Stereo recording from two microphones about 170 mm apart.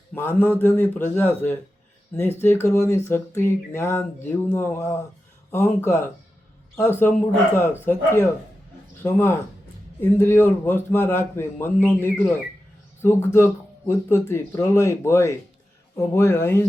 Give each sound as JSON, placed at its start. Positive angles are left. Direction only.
{"t": 0.1, "sound": "speech", "side_deg": 10}
{"t": 7.5, "sound": "speech", "side_deg": 15}